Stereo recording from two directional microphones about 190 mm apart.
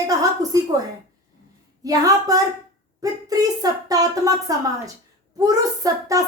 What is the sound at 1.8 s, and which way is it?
A woman's voice, 20° right (ahead or behind).